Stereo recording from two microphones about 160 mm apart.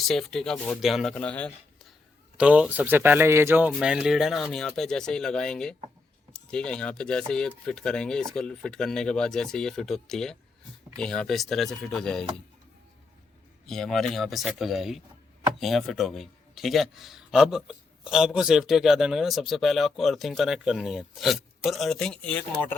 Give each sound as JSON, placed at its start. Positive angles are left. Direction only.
{"t": 0.0, "sound": "speech", "side_deg": 0}
{"t": 2.4, "sound": "speech", "side_deg": -10}
{"t": 13.7, "sound": "speech", "side_deg": 5}